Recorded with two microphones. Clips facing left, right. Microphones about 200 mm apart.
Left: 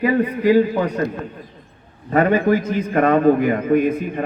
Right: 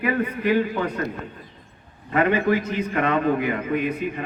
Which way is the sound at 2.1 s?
45° left (ahead or behind).